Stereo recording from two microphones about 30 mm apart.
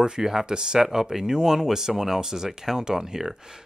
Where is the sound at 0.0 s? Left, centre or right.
Right.